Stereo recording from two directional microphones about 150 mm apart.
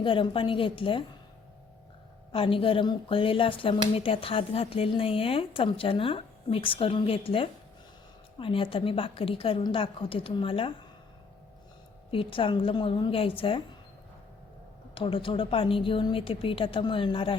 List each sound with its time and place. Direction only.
0.0 s speech: 35° left (ahead or behind)
2.3 s speech: 35° left (ahead or behind)
12.1 s speech: 35° left (ahead or behind)
14.9 s speech: 35° left (ahead or behind)